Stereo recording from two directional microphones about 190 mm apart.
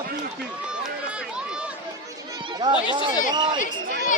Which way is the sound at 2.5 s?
25° right (ahead or behind).